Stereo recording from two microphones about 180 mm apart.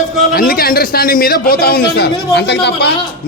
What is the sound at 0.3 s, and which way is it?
A man's voice, 55° left (ahead or behind).